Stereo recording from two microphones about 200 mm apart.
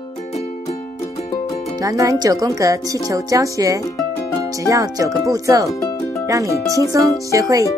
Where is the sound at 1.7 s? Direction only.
15° right (ahead or behind).